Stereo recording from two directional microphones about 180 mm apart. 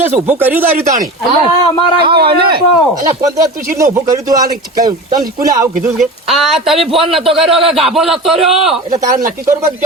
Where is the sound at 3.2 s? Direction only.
20° right (ahead or behind).